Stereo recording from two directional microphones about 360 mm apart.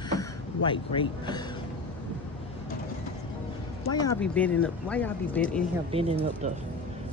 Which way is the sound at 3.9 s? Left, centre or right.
Centre.